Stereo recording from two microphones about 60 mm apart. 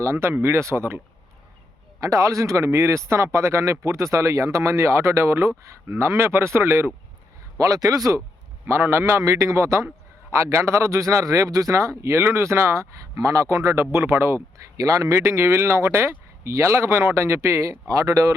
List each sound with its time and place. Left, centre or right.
0.0 s speech: right
2.0 s speech: right
2.6 s speech: right
7.6 s speech: right
8.6 s speech: right
9.2 s speech: right
10.3 s speech: right
14.8 s speech: right